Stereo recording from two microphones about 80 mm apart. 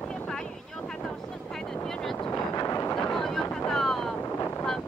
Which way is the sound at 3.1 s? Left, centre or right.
Centre.